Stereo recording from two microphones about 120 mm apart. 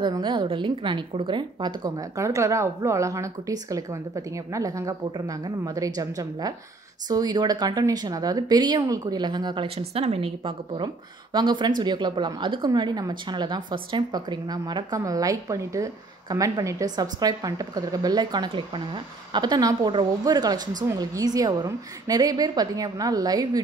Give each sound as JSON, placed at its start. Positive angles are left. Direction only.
{"t": 0.0, "sound": "a woman's voice", "side_deg": -40}
{"t": 2.1, "sound": "a woman's voice", "side_deg": -25}
{"t": 9.8, "sound": "a woman's voice", "side_deg": -55}